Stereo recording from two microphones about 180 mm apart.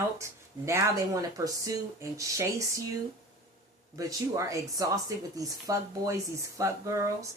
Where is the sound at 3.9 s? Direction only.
15° right (ahead or behind).